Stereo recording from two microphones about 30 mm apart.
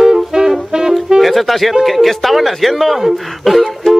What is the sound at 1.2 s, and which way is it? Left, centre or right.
Speech, centre.